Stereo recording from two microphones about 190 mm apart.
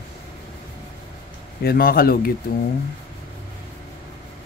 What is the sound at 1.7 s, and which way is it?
Speech, 50° left (ahead or behind).